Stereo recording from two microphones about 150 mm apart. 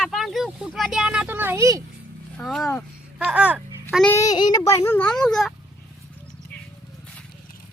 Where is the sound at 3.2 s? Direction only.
10° right (ahead or behind).